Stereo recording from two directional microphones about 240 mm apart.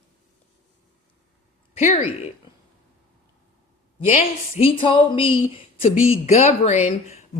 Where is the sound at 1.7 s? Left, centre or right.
Left.